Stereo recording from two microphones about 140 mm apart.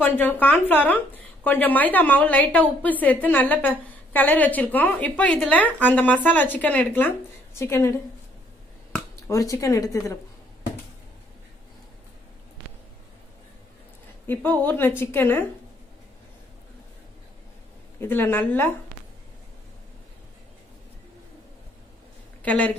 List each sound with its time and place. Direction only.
0.0 s a woman's voice: 15° left (ahead or behind)
9.1 s speech: 25° left (ahead or behind)
14.2 s a woman's voice: 15° left (ahead or behind)
18.0 s a woman's voice: 15° left (ahead or behind)
22.4 s speech: 10° left (ahead or behind)